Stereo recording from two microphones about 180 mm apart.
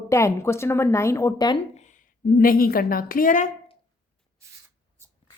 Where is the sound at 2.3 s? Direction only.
55° left (ahead or behind).